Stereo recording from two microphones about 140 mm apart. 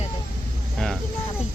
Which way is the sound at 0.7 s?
5° left (ahead or behind).